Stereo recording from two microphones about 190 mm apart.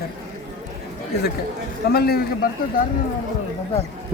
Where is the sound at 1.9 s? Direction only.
55° left (ahead or behind).